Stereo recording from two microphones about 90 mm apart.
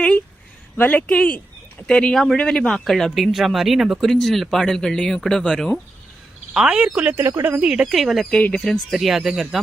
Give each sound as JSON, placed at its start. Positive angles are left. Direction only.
{"t": 0.8, "sound": "speech", "side_deg": 15}
{"t": 6.5, "sound": "speech", "side_deg": -10}
{"t": 7.2, "sound": "speech", "side_deg": -30}
{"t": 7.6, "sound": "speech", "side_deg": -5}
{"t": 8.3, "sound": "speech", "side_deg": 10}